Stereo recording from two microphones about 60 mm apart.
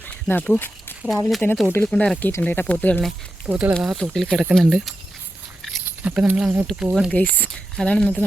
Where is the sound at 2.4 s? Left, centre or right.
Left.